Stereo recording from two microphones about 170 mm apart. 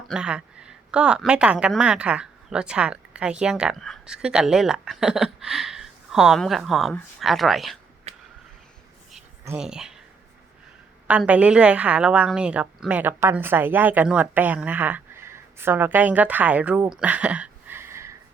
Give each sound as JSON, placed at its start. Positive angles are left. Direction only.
{"t": 0.1, "sound": "a woman's voice", "side_deg": -5}
{"t": 8.1, "sound": "a sound", "side_deg": -40}
{"t": 9.6, "sound": "a woman's voice", "side_deg": -5}
{"t": 11.1, "sound": "a woman's voice", "side_deg": -5}